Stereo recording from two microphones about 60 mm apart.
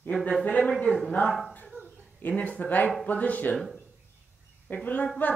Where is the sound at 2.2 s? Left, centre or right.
Left.